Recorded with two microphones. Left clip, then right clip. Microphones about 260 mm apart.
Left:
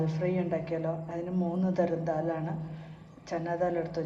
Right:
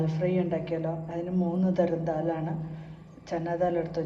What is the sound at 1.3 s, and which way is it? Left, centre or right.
Speech, left.